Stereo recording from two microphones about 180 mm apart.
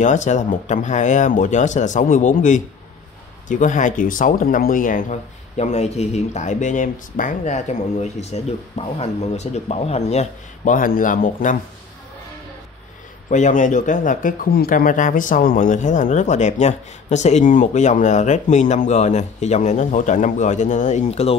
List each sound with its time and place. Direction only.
0.0 s speech: 40° left (ahead or behind)
13.3 s speech: 45° left (ahead or behind)